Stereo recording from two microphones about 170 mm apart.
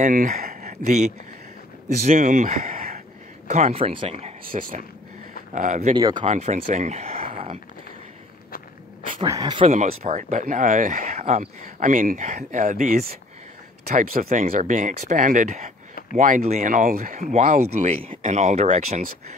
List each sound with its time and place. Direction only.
0.0 s speech: 50° right (ahead or behind)
3.4 s speech: 40° right (ahead or behind)
4.6 s speech: 55° right (ahead or behind)
5.9 s speech: 25° right (ahead or behind)
6.2 s speech: 40° right (ahead or behind)
9.2 s speech: 25° right (ahead or behind)
9.7 s speech: 45° right (ahead or behind)